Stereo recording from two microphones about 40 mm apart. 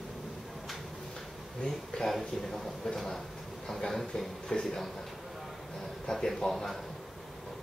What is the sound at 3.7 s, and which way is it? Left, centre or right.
Speech, centre.